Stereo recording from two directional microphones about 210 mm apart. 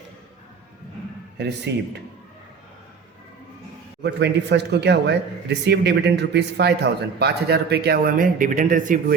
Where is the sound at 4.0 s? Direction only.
55° right (ahead or behind).